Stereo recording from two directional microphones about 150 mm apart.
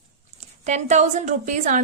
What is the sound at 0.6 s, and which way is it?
A woman's voice, 50° right (ahead or behind).